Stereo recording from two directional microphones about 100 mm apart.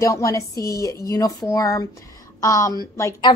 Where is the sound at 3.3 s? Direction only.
55° left (ahead or behind).